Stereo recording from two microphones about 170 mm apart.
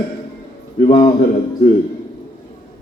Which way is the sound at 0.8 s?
30° left (ahead or behind).